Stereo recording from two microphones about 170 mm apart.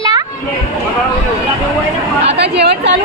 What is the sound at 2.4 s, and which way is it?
Chatter, 80° right.